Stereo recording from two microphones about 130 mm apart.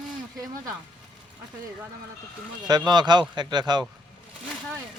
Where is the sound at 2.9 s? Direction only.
35° right (ahead or behind).